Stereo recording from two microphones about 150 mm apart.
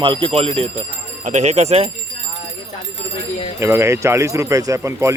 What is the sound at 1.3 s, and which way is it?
Speech, 50° right (ahead or behind).